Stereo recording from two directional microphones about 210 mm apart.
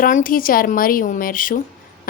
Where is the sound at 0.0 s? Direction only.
40° left (ahead or behind).